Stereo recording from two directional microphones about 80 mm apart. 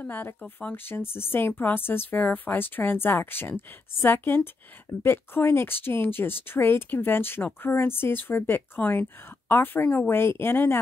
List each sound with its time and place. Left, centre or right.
0.0 s speech: left
0.8 s speech: left